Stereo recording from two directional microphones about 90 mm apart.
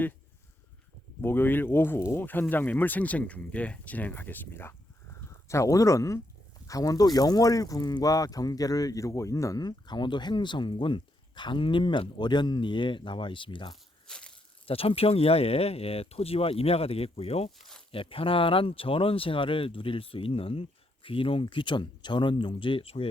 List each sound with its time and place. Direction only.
1.2 s speech: 25° left (ahead or behind)
5.5 s speech: 35° left (ahead or behind)
9.6 s speech: 55° left (ahead or behind)
14.1 s a sound: 10° left (ahead or behind)
14.7 s speech: 90° left